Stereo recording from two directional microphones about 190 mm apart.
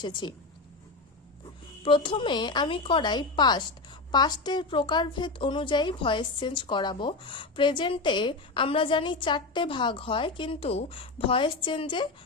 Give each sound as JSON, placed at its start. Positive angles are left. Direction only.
{"t": 0.0, "sound": "a woman's voice", "side_deg": 25}
{"t": 1.8, "sound": "a woman's voice", "side_deg": 25}